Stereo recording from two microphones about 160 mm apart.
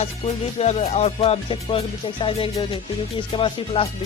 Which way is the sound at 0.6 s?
40° left (ahead or behind).